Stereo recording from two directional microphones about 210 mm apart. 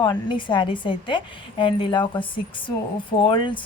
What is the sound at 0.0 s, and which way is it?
Speech, 20° left (ahead or behind).